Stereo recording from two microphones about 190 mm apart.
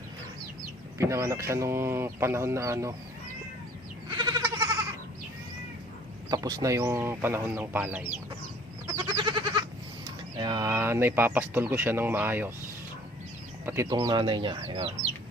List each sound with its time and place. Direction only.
0.9 s speech: 15° right (ahead or behind)
4.1 s goat: 25° right (ahead or behind)
6.3 s speech: 20° right (ahead or behind)
8.9 s goat: 25° right (ahead or behind)
10.3 s speech: 20° right (ahead or behind)
13.7 s speech: 15° right (ahead or behind)